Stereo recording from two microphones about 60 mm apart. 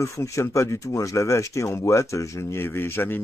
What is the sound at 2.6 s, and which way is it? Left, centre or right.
Speech, left.